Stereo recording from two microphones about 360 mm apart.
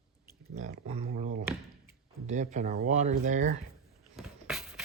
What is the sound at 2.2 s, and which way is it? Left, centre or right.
Speech, centre.